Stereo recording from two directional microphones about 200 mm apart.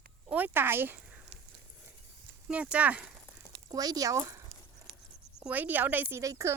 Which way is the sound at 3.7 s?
20° right (ahead or behind).